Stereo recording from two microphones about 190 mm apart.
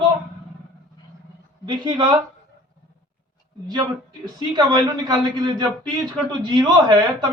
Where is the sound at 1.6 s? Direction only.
25° right (ahead or behind).